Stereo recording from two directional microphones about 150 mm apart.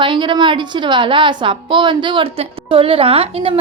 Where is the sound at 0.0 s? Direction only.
30° right (ahead or behind).